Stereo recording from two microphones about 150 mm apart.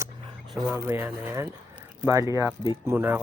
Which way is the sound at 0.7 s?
15° right (ahead or behind).